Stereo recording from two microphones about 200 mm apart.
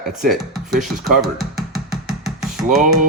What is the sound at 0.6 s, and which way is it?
Music, centre (ahead or behind).